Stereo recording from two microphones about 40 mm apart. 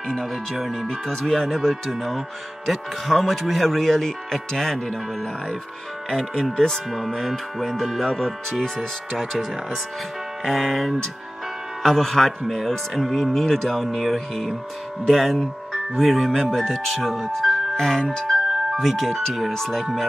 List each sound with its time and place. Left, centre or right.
0.1 s speech: centre
7.2 s speech: centre